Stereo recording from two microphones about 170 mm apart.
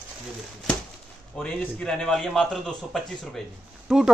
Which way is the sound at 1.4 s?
5° left (ahead or behind).